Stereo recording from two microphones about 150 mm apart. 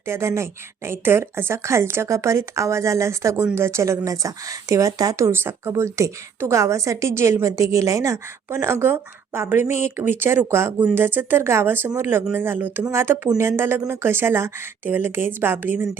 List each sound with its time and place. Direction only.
0.1 s speech: 20° right (ahead or behind)